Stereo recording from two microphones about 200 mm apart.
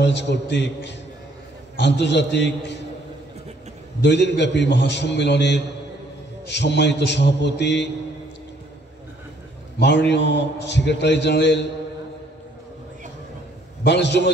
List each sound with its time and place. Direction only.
0.0 s a man's voice: 60° left (ahead or behind)
4.0 s a man's voice: 60° left (ahead or behind)
9.8 s a man's voice: 60° left (ahead or behind)
13.8 s a man's voice: 60° left (ahead or behind)